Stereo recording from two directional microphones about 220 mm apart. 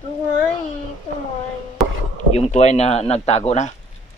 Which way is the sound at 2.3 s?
30° left (ahead or behind).